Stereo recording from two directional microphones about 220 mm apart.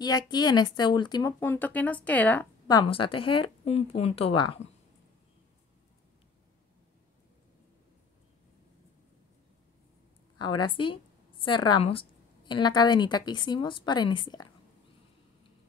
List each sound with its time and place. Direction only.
0.3 s a woman's voice: 20° left (ahead or behind)
2.7 s a woman's voice: 20° left (ahead or behind)
10.6 s a woman's voice: 20° left (ahead or behind)